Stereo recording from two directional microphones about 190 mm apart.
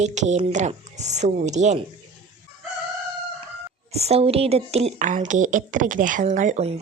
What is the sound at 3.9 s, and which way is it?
Speech, 35° right (ahead or behind).